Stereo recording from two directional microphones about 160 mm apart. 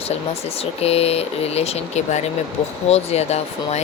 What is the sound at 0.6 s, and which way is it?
Speech, 40° left (ahead or behind).